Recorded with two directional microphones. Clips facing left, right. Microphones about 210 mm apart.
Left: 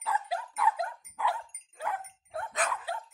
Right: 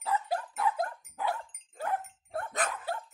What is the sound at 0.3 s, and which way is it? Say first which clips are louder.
Dog: even; 45° right (ahead or behind).